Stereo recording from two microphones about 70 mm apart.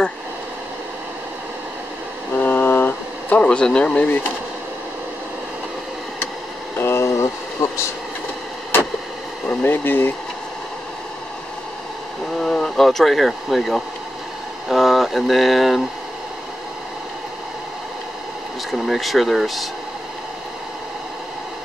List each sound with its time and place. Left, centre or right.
2.3 s a sound: left
3.4 s speech: centre
6.8 s a sound: left
9.5 s speech: left
12.4 s speech: centre
18.7 s speech: centre